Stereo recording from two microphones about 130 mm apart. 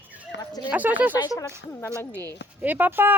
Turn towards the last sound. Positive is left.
turn(degrees=-15)  # may be behind; listen again after turning